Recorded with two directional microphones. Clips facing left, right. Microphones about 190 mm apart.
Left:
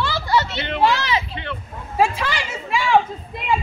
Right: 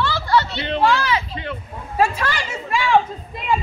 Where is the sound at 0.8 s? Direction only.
20° left (ahead or behind).